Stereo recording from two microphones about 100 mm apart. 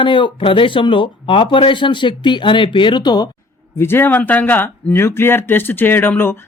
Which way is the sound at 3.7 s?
25° left (ahead or behind).